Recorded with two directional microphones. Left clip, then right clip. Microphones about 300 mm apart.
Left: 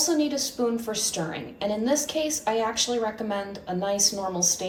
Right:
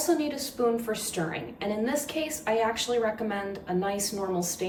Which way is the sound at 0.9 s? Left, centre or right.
Centre.